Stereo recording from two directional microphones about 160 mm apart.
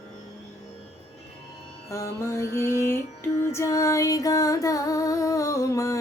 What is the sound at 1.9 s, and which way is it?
Music, 20° left (ahead or behind).